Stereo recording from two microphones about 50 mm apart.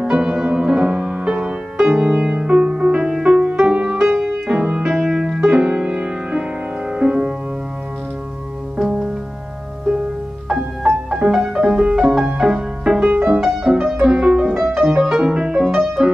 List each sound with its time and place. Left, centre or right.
0.0 s music: centre
11.2 s music: centre
13.1 s music: right
13.4 s music: centre